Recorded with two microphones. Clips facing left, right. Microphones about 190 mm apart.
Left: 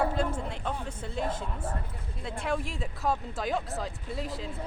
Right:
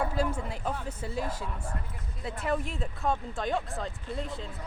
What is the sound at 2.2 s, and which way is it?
Speech, 5° right (ahead or behind).